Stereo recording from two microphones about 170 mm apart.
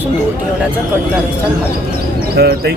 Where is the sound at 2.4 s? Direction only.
65° right (ahead or behind).